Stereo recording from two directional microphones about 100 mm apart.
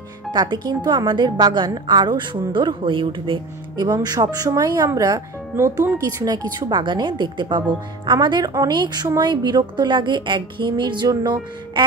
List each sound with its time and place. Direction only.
0.3 s a woman's voice: 45° right (ahead or behind)